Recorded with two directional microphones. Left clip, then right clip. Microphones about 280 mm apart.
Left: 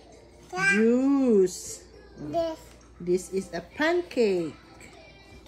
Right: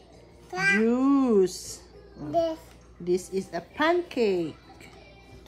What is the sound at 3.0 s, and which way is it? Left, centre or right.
A woman's voice, centre.